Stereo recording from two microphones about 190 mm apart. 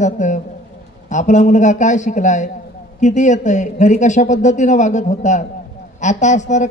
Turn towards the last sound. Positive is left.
turn(degrees=40)  # may be behind; listen again after turning